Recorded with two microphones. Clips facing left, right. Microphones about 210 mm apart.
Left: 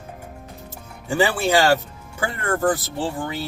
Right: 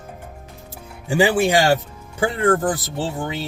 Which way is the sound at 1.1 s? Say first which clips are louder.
Right 3 dB; 15° right (ahead or behind).